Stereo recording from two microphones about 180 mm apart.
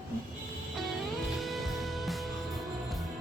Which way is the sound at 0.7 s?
Centre (ahead or behind).